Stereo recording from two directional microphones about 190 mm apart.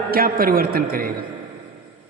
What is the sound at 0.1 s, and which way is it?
A man's voice, 50° right (ahead or behind).